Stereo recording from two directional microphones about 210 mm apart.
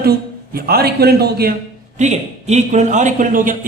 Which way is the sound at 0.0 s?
45° right (ahead or behind).